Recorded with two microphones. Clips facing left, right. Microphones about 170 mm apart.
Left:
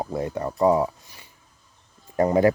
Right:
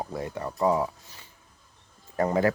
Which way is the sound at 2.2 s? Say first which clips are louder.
Left 5 dB; 15° left (ahead or behind).